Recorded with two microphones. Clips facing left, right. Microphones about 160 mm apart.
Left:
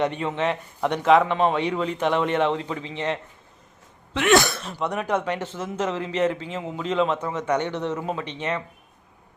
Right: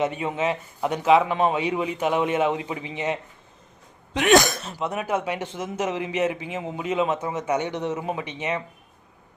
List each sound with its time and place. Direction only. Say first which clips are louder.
0.0 s a man's voice: even; 10° right (ahead or behind)
4.4 s speech: right 1 dB; 40° right (ahead or behind)
4.7 s a man's voice: left 3 dB; 5° right (ahead or behind)